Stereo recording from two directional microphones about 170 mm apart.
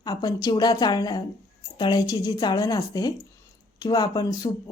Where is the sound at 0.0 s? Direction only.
25° left (ahead or behind).